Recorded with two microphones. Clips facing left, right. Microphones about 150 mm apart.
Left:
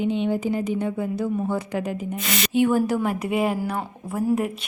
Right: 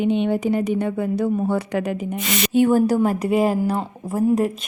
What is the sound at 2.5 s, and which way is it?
Speech, 40° right (ahead or behind).